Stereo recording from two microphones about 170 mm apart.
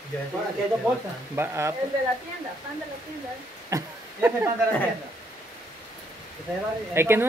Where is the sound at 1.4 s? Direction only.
15° right (ahead or behind).